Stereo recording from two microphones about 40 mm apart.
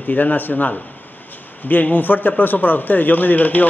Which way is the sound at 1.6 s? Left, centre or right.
Left.